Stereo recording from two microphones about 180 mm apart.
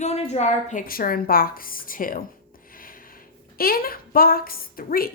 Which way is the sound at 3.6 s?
55° left (ahead or behind).